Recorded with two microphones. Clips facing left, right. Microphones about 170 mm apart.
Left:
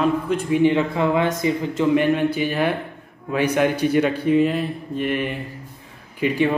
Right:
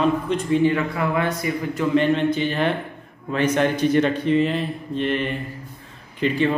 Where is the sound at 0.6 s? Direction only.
20° left (ahead or behind).